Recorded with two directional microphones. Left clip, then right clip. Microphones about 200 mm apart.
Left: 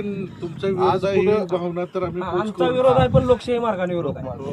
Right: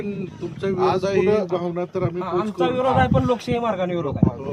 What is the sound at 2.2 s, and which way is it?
A man's voice, 20° left (ahead or behind).